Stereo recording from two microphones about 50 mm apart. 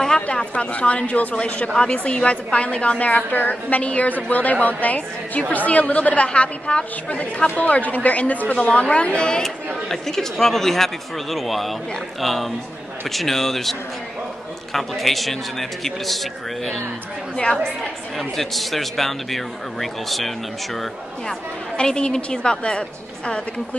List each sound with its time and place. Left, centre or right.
0.0 s speech: centre
9.4 s speech: centre
18.1 s speech: centre
21.3 s speech: centre